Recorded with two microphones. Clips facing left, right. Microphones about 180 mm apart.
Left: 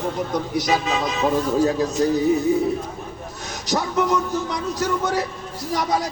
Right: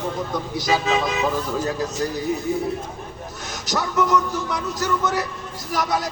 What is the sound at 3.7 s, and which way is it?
A man's voice, 25° left (ahead or behind).